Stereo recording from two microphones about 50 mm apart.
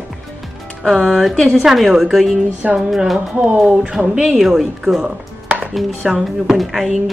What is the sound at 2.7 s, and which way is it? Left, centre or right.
Speech, centre.